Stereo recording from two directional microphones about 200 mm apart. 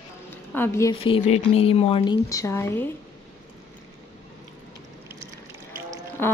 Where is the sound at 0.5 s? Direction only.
10° left (ahead or behind).